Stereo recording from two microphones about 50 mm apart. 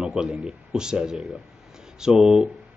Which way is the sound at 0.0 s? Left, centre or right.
Centre.